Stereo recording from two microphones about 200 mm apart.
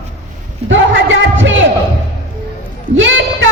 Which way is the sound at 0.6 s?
70° right (ahead or behind).